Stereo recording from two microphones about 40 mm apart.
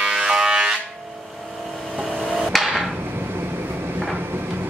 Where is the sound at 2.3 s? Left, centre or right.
Centre.